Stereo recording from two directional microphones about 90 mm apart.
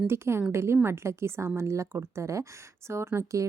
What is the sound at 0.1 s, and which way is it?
Speech, 30° right (ahead or behind).